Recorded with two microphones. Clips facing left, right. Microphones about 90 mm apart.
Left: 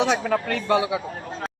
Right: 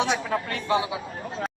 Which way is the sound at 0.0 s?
90° left.